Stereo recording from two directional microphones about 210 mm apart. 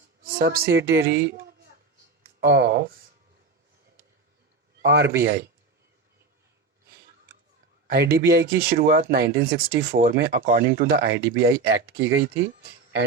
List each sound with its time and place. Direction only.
0.3 s speech: 45° right (ahead or behind)
2.4 s speech: 50° right (ahead or behind)
4.8 s speech: 50° right (ahead or behind)
7.9 s speech: 45° right (ahead or behind)